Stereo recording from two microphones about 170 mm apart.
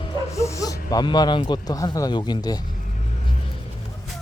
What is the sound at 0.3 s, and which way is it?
Speech, 20° left (ahead or behind).